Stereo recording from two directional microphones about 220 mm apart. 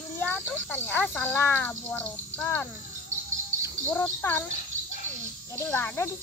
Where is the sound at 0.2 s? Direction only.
10° left (ahead or behind).